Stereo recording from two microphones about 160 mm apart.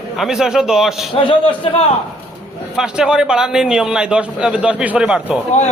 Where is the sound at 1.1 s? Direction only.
35° left (ahead or behind).